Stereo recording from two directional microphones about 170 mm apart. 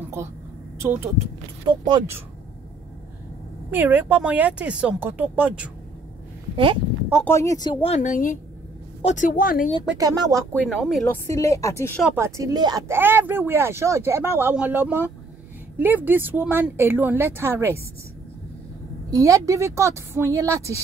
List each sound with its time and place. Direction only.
1.7 s speech: 25° right (ahead or behind)
3.7 s speech: 10° right (ahead or behind)
6.5 s speech: 30° right (ahead or behind)
7.2 s a woman's voice: 15° left (ahead or behind); by 9.7 s 55° left (ahead or behind)
9.9 s speech: 20° right (ahead or behind)
10.7 s speech: centre (ahead or behind)
11.1 s speech: 20° left (ahead or behind)
12.2 s speech: 15° right (ahead or behind)
19.0 s speech: 20° right (ahead or behind)